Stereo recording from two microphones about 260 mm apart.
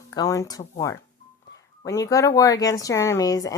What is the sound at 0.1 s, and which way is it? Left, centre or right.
Speech, centre.